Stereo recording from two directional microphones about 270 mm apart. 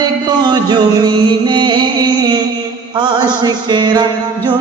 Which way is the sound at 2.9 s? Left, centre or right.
Centre.